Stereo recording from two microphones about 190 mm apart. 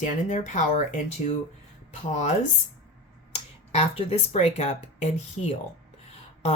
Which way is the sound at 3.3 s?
30° left (ahead or behind).